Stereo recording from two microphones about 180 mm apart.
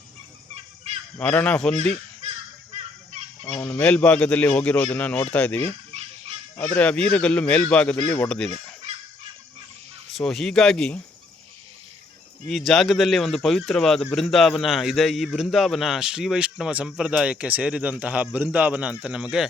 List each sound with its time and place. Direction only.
1.2 s speech: 5° left (ahead or behind)
3.5 s a man's voice: 10° left (ahead or behind)
10.1 s speech: centre (ahead or behind)
12.5 s speech: centre (ahead or behind)